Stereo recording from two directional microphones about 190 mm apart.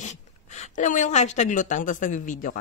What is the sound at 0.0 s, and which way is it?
A woman's voice, 35° left (ahead or behind).